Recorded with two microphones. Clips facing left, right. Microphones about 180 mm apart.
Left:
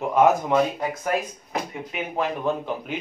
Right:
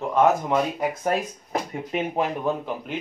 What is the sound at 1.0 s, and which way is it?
Speech, 35° right (ahead or behind).